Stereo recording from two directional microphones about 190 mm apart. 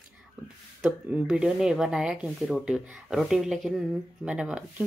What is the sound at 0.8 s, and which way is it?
Speech, 5° right (ahead or behind).